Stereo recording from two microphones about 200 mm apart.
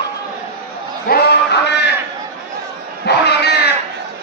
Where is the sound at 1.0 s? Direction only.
55° left (ahead or behind).